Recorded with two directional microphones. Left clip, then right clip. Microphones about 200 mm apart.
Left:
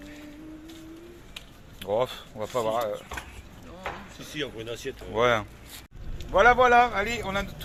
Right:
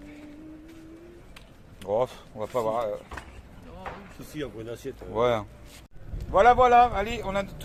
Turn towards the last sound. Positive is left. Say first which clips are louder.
# even
turn(degrees=0)  # may be behind; listen again after turning